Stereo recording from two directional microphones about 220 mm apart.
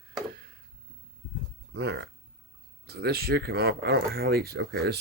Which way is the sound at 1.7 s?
50° right (ahead or behind).